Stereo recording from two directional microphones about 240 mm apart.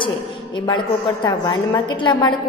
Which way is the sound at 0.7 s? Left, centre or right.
Centre.